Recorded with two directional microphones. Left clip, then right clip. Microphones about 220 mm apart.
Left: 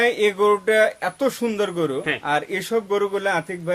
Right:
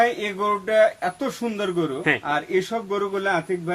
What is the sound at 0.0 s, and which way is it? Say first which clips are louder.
A man's voice: left 3 dB; 50° left (ahead or behind).